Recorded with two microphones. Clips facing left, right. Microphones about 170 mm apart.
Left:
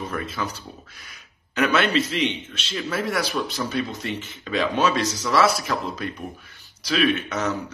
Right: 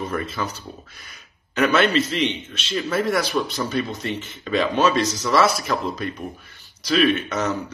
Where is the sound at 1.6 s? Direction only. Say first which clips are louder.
Right 2 dB; 5° left (ahead or behind).